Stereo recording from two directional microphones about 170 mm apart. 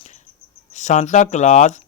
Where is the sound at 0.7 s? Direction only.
45° left (ahead or behind).